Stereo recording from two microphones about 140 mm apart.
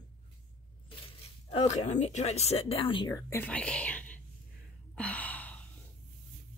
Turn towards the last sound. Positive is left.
turn(degrees=10)  # may be behind; listen again after turning